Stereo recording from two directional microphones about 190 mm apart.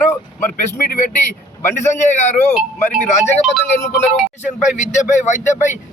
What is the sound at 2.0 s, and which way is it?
Speech, 40° left (ahead or behind).